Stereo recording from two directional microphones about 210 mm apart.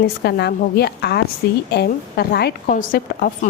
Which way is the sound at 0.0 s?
50° left (ahead or behind).